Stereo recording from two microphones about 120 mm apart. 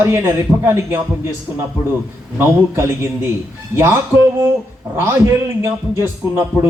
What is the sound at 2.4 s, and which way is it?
A man's voice, 20° right (ahead or behind).